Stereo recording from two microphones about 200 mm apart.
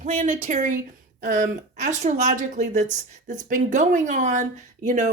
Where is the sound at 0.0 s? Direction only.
35° right (ahead or behind).